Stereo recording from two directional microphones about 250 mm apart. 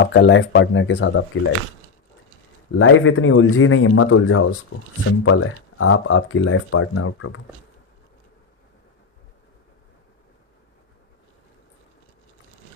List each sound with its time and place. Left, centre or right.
0.0 s speech: left
2.7 s speech: left